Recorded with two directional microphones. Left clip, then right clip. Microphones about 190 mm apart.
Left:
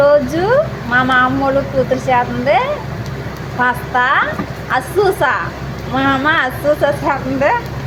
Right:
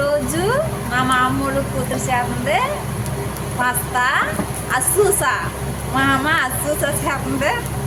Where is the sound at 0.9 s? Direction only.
25° left (ahead or behind).